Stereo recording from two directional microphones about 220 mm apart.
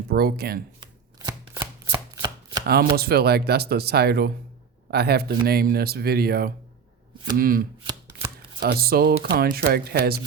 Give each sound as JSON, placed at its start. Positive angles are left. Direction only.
{"t": 0.1, "sound": "speech", "side_deg": -45}
{"t": 0.8, "sound": "chopping", "side_deg": -20}
{"t": 2.9, "sound": "speech", "side_deg": -45}